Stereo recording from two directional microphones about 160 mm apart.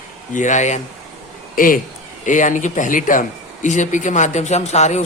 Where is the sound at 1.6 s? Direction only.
60° left (ahead or behind).